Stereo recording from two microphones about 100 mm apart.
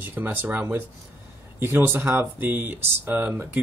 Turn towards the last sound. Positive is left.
turn(degrees=-20)  # may be behind; listen again after turning